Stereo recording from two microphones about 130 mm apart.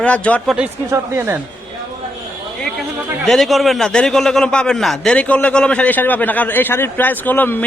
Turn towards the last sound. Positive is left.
turn(degrees=15)  # may be behind; listen again after turning